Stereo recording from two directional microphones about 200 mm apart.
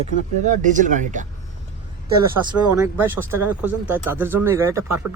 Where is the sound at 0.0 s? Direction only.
40° right (ahead or behind).